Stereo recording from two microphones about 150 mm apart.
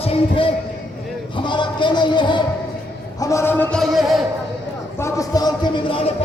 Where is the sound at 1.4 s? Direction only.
30° left (ahead or behind).